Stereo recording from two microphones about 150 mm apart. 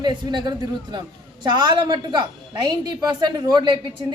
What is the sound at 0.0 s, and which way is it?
A woman's voice, 30° right (ahead or behind).